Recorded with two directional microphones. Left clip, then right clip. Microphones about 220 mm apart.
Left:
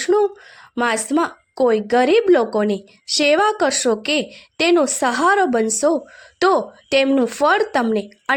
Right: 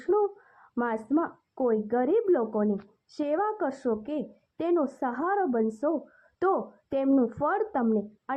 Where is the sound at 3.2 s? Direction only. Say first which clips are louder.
Left 12 dB; 35° left (ahead or behind).